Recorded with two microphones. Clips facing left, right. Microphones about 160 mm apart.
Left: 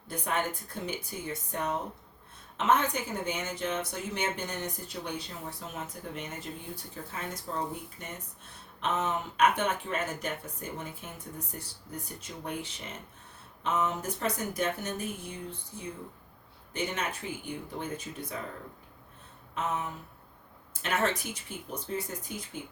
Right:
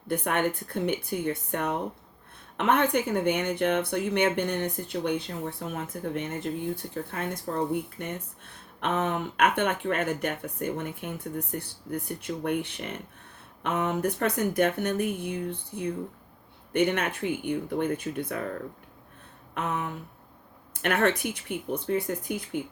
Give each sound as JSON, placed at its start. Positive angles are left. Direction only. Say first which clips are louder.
{"t": 0.1, "sound": "speech", "louder": "right 6 dB", "side_deg": -60}
{"t": 19.5, "sound": "speech", "louder": "right 2 dB", "side_deg": -60}